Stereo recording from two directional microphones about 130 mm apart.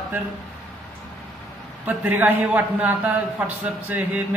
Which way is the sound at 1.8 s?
10° right (ahead or behind).